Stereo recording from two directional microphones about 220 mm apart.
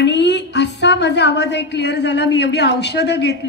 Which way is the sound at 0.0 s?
50° left (ahead or behind).